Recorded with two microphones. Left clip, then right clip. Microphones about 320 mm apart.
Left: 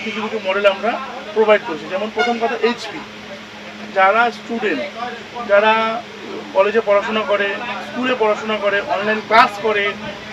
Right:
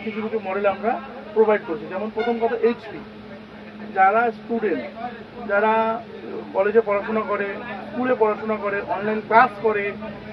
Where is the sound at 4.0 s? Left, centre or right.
Left.